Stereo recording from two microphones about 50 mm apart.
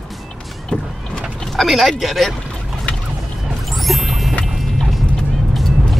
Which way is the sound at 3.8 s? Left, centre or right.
Centre.